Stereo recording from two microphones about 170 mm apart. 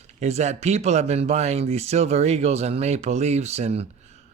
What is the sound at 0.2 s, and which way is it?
Speech, 40° right (ahead or behind).